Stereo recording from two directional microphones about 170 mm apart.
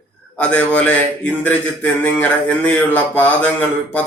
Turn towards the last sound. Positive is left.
turn(degrees=10)  # may be behind; listen again after turning